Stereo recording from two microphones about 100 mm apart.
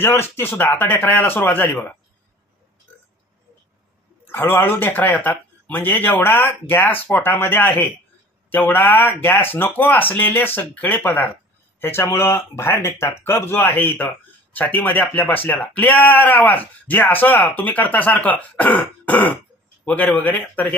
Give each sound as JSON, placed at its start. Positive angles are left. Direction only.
{"t": 0.0, "sound": "speech", "side_deg": 25}
{"t": 4.3, "sound": "speech", "side_deg": 25}